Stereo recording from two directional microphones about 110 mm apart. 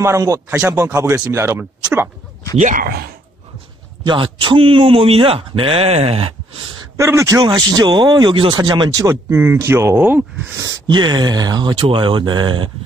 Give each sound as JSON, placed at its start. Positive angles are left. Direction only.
{"t": 0.0, "sound": "speech", "side_deg": -30}
{"t": 4.0, "sound": "speech", "side_deg": -45}
{"t": 5.9, "sound": "speech", "side_deg": -70}
{"t": 7.0, "sound": "speech", "side_deg": -25}
{"t": 9.1, "sound": "speech", "side_deg": -20}
{"t": 10.6, "sound": "speech", "side_deg": -35}